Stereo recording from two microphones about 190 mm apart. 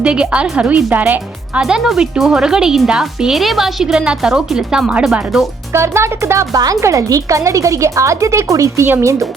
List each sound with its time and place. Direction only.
0.0 s speech: 5° right (ahead or behind)
5.7 s speech: 15° right (ahead or behind)